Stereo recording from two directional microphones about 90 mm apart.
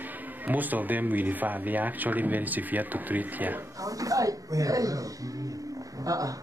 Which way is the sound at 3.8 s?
40° right (ahead or behind).